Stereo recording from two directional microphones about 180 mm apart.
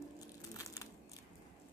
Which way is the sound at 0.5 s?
20° left (ahead or behind).